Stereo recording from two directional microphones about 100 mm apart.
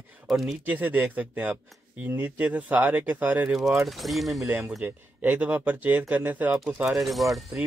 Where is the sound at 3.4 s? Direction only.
Centre (ahead or behind).